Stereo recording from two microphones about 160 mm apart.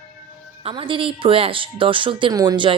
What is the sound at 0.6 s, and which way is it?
Speech, 35° right (ahead or behind).